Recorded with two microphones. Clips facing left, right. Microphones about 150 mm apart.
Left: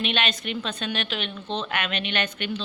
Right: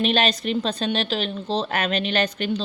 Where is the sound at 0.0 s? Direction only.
35° right (ahead or behind).